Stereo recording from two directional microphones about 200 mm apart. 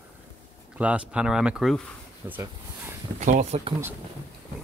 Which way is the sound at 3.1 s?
35° right (ahead or behind).